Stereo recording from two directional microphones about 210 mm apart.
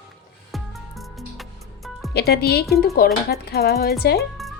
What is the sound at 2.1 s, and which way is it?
Speech, 50° left (ahead or behind).